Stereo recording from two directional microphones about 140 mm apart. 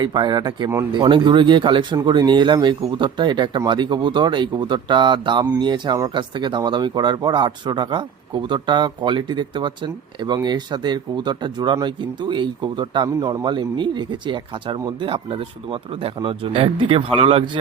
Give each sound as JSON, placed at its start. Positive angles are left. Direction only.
{"t": 0.0, "sound": "speech", "side_deg": -30}